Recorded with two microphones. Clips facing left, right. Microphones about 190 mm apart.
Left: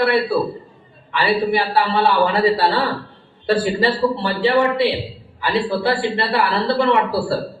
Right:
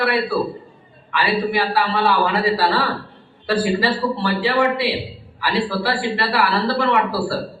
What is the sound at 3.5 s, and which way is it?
A man's voice, 25° left (ahead or behind).